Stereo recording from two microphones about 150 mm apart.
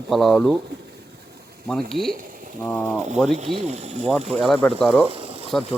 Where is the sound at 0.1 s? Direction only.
Centre (ahead or behind).